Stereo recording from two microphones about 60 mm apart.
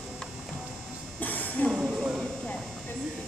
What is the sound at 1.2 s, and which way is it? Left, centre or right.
Music, left.